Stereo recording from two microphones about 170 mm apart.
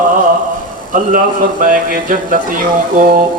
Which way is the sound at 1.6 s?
50° right (ahead or behind).